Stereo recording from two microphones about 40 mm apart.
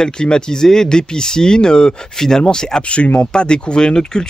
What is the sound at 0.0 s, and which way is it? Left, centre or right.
Speech, centre.